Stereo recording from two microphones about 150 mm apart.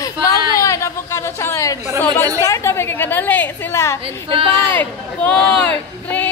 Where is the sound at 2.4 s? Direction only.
20° left (ahead or behind).